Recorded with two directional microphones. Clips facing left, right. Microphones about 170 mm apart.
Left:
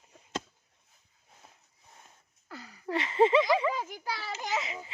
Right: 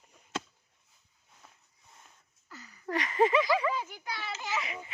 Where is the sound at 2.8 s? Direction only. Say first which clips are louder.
Left 2 dB; 25° left (ahead or behind).